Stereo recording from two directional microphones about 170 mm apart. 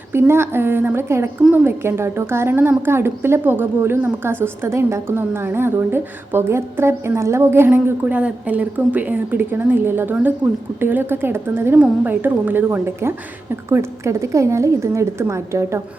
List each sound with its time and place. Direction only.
0.1 s a woman's voice: 15° right (ahead or behind)